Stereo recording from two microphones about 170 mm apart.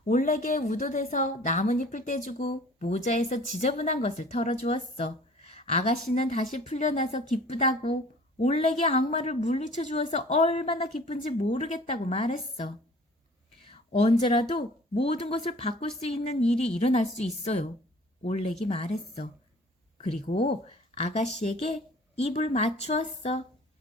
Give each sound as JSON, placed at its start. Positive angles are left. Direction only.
{"t": 0.1, "sound": "a woman's voice", "side_deg": 50}